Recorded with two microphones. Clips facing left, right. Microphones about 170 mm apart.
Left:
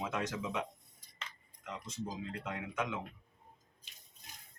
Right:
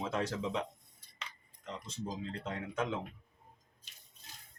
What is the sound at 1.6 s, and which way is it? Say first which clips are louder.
Speech: right 1 dB; 30° right (ahead or behind).